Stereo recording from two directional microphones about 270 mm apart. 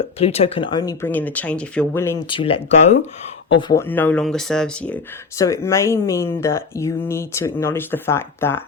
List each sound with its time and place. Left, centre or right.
0.2 s speech: left
2.4 s speech: left
3.5 s speech: centre